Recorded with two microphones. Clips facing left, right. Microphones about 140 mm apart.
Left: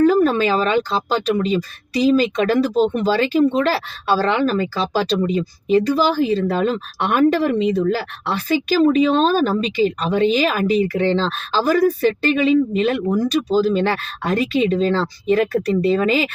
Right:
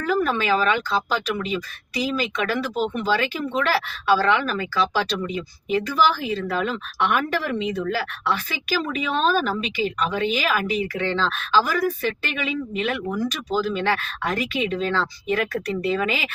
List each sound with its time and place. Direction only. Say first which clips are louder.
0.0 s speech: left 8 dB; 35° left (ahead or behind)